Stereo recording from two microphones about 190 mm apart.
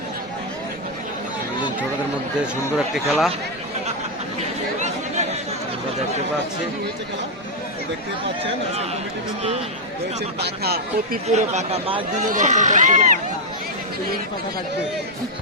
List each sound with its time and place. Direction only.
2.7 s speech: centre (ahead or behind)
4.4 s chatter: 35° right (ahead or behind)
10.4 s speech: 55° right (ahead or behind)
11.3 s speech: 35° right (ahead or behind)
12.2 s speech: 40° right (ahead or behind)